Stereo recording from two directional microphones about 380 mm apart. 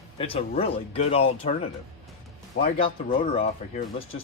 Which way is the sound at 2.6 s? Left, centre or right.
Centre.